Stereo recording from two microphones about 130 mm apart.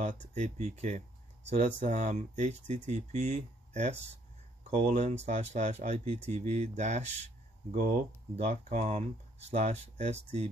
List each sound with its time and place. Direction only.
0.3 s speech: 65° right (ahead or behind)
7.7 s speech: 75° right (ahead or behind); by 10.5 s 60° right (ahead or behind)